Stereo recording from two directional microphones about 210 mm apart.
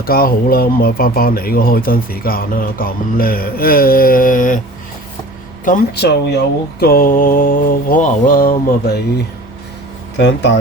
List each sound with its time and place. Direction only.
0.0 s speech: 45° left (ahead or behind)
5.6 s speech: 45° left (ahead or behind)